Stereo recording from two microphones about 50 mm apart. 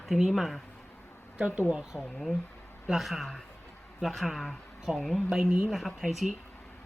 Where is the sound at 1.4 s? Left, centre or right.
Right.